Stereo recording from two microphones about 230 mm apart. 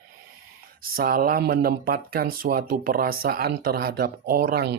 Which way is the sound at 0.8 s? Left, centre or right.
Right.